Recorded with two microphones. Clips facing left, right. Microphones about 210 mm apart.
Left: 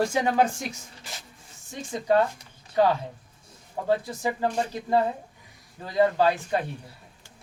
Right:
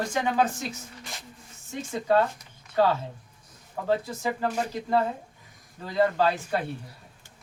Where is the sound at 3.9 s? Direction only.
15° left (ahead or behind).